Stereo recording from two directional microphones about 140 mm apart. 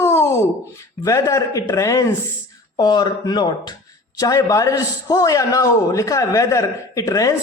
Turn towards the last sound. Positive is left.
turn(degrees=25)  # may be behind; listen again after turning